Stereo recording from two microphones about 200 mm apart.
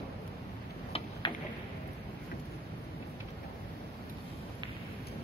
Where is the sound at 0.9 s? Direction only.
25° left (ahead or behind).